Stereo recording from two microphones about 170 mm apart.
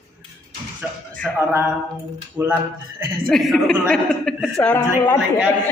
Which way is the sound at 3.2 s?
Centre (ahead or behind).